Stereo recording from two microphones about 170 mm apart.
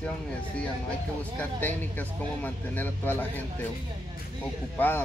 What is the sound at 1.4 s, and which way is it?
Speech, 10° left (ahead or behind).